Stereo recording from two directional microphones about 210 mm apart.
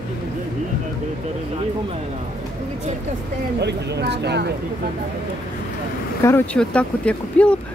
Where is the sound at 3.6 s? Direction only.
55° right (ahead or behind).